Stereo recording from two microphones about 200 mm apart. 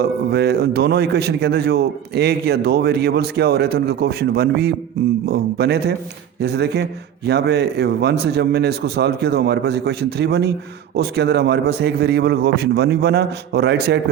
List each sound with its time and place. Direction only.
0.0 s a man's voice: 55° right (ahead or behind)